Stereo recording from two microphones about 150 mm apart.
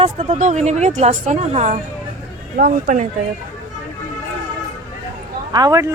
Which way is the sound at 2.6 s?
70° right (ahead or behind).